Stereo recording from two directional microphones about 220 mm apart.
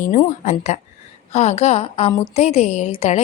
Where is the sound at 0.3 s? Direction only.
30° left (ahead or behind).